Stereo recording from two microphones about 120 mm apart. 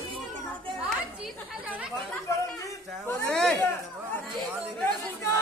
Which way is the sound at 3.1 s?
15° left (ahead or behind).